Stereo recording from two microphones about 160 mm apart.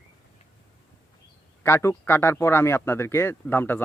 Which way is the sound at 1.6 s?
15° left (ahead or behind).